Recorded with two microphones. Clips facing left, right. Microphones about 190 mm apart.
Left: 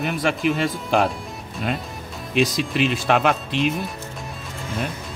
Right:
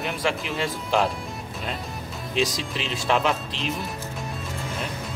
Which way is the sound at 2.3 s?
60° left (ahead or behind).